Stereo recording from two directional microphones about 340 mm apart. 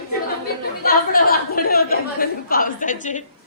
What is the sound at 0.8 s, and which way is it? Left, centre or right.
A woman's voice, left.